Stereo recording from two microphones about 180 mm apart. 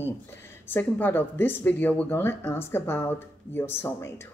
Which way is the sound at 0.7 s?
10° left (ahead or behind).